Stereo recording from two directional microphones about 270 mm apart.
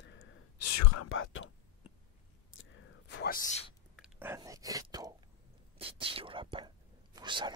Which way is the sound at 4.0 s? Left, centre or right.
Centre.